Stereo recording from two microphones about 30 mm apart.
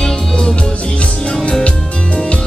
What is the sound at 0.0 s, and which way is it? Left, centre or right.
Music, left.